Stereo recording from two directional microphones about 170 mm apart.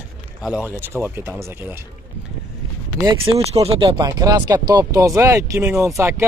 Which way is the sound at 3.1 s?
35° right (ahead or behind).